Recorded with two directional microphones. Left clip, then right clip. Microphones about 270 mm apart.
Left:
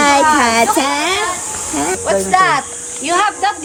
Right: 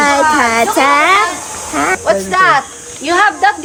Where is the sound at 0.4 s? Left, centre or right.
Centre.